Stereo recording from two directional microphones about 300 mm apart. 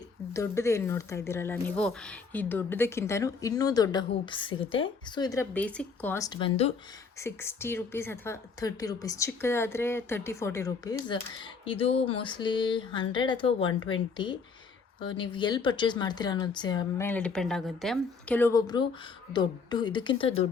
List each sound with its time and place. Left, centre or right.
0.3 s a woman's voice: centre